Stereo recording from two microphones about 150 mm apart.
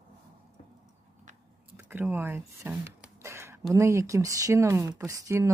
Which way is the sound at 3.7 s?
20° right (ahead or behind).